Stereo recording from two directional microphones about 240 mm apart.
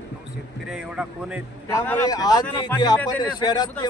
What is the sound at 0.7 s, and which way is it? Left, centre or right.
Speech, centre.